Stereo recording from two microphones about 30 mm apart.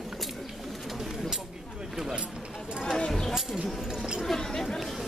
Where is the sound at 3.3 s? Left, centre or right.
Centre.